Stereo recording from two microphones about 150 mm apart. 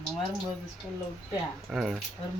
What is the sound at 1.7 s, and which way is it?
Speech, centre (ahead or behind).